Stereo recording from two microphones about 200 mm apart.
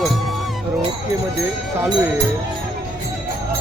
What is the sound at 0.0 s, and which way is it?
Music, centre (ahead or behind).